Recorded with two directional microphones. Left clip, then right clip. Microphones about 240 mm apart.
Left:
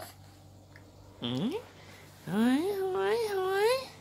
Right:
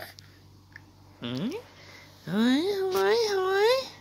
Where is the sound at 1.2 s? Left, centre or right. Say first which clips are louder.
Even; centre.